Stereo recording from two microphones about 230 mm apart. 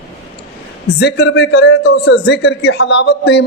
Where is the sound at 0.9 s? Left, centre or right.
Left.